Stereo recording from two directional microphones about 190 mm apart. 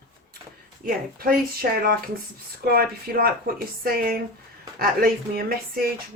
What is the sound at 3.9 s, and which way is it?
Speech, 50° right (ahead or behind).